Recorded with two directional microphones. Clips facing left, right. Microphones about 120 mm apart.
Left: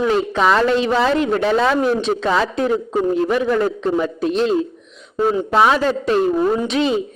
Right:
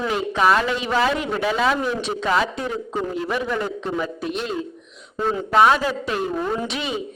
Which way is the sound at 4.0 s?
35° left (ahead or behind).